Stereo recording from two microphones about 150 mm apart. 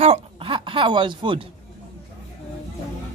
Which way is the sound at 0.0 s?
40° right (ahead or behind).